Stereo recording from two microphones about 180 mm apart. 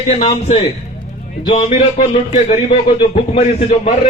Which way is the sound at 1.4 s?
30° left (ahead or behind).